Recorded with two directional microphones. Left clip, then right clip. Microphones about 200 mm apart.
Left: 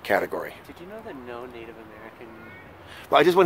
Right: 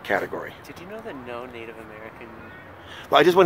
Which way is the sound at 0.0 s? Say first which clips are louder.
Left 1 dB; 15° left (ahead or behind).